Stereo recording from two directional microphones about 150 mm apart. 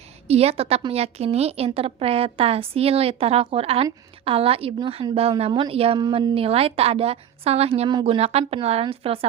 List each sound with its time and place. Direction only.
0.3 s a woman's voice: 45° right (ahead or behind)
7.9 s a woman's voice: 30° right (ahead or behind)